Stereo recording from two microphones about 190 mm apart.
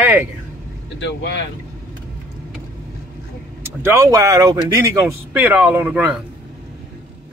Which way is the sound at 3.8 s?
15° right (ahead or behind).